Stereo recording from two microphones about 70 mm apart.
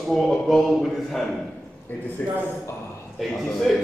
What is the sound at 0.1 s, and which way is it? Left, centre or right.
A man's voice, centre.